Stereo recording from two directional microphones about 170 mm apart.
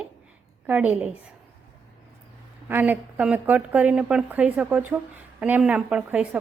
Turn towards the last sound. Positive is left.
turn(degrees=-10)  # may be behind; listen again after turning